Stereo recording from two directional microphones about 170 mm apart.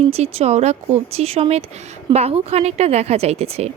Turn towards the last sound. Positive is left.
turn(degrees=-35)  # may be behind; listen again after turning